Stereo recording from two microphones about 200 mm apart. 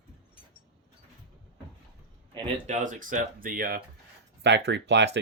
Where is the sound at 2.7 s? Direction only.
40° right (ahead or behind).